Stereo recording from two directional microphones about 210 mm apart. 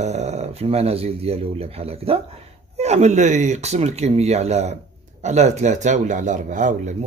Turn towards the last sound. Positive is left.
turn(degrees=-35)  # may be behind; listen again after turning